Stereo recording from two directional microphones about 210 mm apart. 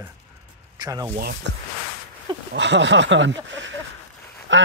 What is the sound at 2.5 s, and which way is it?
Speech, 55° right (ahead or behind).